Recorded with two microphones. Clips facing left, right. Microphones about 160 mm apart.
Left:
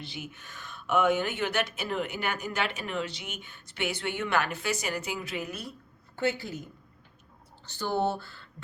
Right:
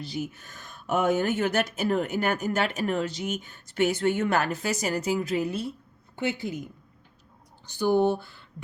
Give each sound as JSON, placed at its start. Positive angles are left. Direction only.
{"t": 0.0, "sound": "speech", "side_deg": -40}
{"t": 6.1, "sound": "a woman's voice", "side_deg": -20}
{"t": 7.7, "sound": "speech", "side_deg": -15}